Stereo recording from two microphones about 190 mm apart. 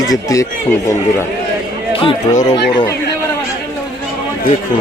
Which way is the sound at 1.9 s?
30° left (ahead or behind).